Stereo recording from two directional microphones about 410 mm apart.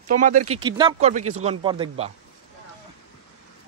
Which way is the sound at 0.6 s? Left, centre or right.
Centre.